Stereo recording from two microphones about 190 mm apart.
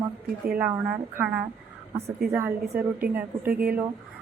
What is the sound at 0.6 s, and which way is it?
A woman's voice, 10° right (ahead or behind).